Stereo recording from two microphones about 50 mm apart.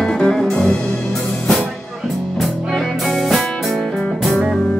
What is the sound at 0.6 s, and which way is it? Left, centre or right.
Music, left.